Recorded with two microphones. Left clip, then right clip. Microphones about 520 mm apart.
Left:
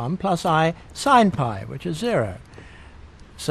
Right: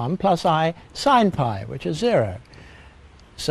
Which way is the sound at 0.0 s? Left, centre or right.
Right.